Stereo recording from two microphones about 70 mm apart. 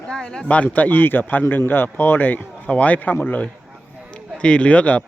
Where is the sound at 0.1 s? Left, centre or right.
Centre; by 3.5 s left.